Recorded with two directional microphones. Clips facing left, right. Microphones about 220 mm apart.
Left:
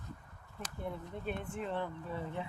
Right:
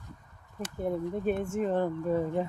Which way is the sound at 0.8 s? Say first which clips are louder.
Right 11 dB; 45° right (ahead or behind).